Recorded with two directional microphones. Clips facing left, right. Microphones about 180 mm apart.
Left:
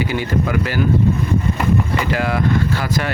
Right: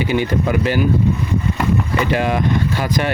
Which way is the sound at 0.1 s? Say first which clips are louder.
Right 2 dB; 20° right (ahead or behind).